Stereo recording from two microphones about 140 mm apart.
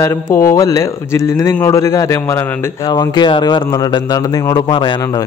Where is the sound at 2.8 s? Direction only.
30° left (ahead or behind).